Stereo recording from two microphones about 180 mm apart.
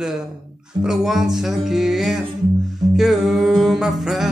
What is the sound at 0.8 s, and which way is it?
Music, centre (ahead or behind).